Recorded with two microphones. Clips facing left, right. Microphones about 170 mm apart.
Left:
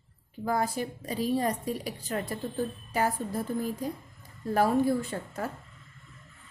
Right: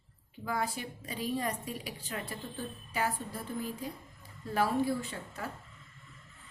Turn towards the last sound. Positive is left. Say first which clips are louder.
# left 6 dB
turn(degrees=45)  # may be behind; listen again after turning